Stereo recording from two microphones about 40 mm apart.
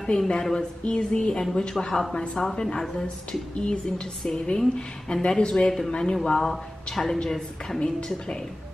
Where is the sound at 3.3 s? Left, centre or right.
Left.